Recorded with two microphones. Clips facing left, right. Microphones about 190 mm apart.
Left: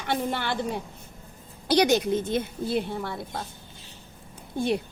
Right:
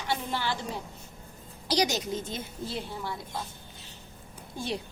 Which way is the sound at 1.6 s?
55° left (ahead or behind).